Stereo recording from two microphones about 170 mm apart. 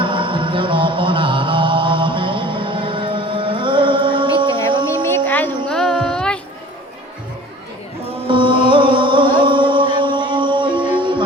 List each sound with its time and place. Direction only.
0.0 s music: 30° right (ahead or behind)
5.0 s a sound: 10° left (ahead or behind)
5.6 s music: 5° left (ahead or behind)
8.3 s music: 30° right (ahead or behind)